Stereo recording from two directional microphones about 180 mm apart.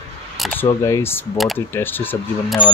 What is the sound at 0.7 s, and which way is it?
Speech, 15° left (ahead or behind).